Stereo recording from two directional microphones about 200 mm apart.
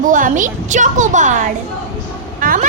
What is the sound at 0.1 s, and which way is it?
Speech, 40° right (ahead or behind).